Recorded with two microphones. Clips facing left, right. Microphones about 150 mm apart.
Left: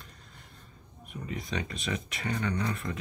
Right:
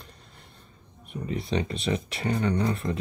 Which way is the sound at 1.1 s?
30° right (ahead or behind).